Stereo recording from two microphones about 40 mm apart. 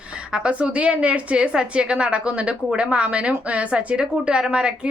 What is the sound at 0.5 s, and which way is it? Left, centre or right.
A woman's voice, right.